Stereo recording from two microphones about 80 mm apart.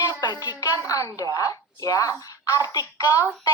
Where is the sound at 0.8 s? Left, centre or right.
Left.